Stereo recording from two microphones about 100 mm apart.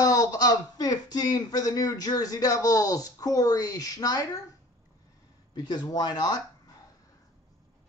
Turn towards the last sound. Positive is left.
turn(degrees=45)  # may be behind; listen again after turning